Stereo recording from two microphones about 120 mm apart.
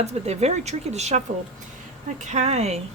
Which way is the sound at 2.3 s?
65° right (ahead or behind).